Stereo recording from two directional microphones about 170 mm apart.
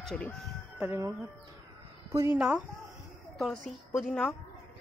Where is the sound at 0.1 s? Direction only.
5° left (ahead or behind).